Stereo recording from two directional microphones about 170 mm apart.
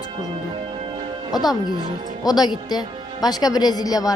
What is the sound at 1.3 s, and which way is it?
Speech, 25° left (ahead or behind).